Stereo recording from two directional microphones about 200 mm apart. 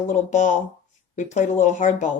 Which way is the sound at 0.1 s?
40° left (ahead or behind).